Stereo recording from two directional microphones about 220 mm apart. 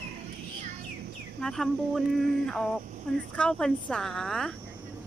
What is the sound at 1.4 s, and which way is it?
Speech, centre (ahead or behind).